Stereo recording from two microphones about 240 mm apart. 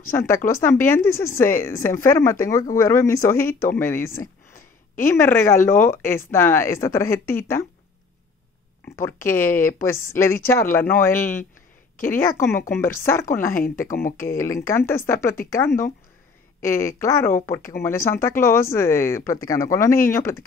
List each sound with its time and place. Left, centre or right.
0.0 s speech: centre
8.8 s speech: centre
13.8 s speech: left
14.2 s speech: centre
17.6 s speech: left
17.8 s speech: centre